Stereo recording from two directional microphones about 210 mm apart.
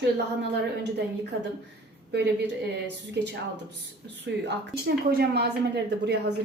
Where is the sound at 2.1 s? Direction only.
50° right (ahead or behind).